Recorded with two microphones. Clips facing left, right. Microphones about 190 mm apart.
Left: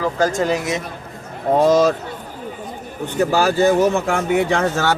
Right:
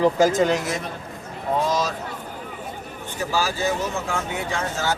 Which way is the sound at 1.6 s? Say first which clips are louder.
Left 12 dB; 55° left (ahead or behind).